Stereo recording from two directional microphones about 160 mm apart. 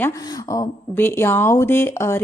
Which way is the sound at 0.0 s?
20° left (ahead or behind).